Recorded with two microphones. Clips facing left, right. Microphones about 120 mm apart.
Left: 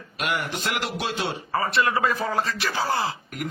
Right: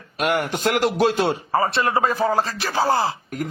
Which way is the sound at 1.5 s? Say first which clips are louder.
Right 1 dB; 30° right (ahead or behind).